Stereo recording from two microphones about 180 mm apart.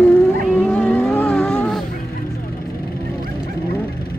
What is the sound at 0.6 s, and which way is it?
Vehicle, 5° left (ahead or behind).